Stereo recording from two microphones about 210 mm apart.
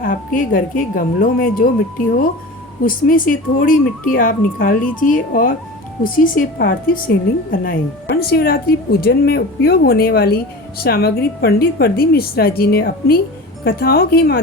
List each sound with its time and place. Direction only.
0.0 s speech: 40° left (ahead or behind)
2.8 s speech: 40° left (ahead or behind)